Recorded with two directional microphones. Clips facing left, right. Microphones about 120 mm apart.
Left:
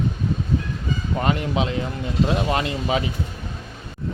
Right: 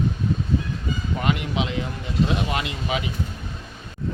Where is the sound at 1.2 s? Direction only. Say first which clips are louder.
Left 2 dB; 35° left (ahead or behind).